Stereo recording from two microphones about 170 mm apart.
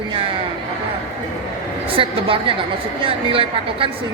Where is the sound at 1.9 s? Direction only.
30° right (ahead or behind).